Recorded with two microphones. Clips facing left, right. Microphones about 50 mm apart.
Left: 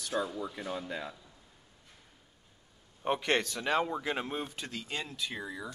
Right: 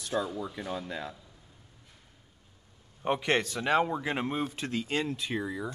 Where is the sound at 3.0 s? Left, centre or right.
Centre.